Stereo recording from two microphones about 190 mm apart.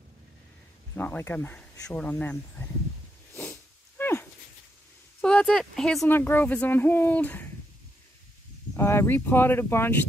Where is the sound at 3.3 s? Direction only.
10° left (ahead or behind).